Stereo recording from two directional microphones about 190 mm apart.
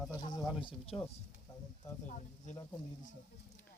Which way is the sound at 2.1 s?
40° left (ahead or behind).